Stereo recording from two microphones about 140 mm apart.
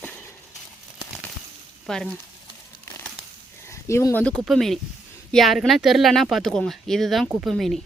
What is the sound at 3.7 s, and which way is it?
Speech, 20° left (ahead or behind).